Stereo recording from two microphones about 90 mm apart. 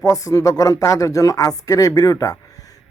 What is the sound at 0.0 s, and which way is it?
Speech, 40° left (ahead or behind).